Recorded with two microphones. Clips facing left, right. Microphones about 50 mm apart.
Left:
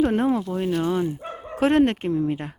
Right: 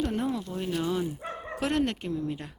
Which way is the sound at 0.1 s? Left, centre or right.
Left.